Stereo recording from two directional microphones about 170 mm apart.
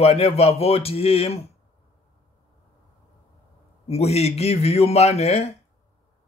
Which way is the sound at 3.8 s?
40° left (ahead or behind).